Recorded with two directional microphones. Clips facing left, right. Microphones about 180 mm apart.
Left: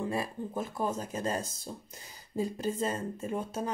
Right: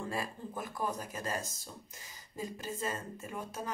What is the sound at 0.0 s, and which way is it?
Speech, 20° left (ahead or behind).